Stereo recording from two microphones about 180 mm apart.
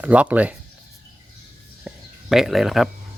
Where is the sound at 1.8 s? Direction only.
Centre (ahead or behind).